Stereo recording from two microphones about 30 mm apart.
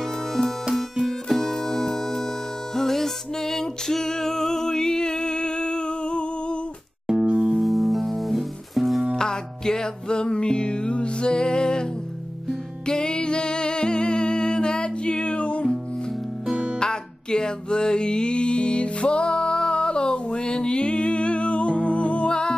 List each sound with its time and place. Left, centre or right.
1.0 s music: centre; by 6.6 s left
7.2 s music: right
7.5 s music: centre
9.1 s music: left
12.8 s music: left
16.8 s music: left
22.3 s music: left